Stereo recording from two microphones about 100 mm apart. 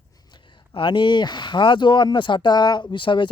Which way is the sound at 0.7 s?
55° left (ahead or behind).